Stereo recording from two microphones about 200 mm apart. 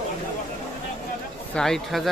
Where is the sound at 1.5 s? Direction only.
Centre (ahead or behind).